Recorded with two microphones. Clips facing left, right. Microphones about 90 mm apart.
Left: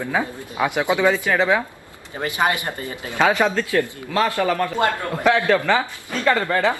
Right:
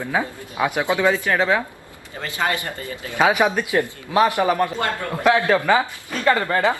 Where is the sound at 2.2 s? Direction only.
20° left (ahead or behind).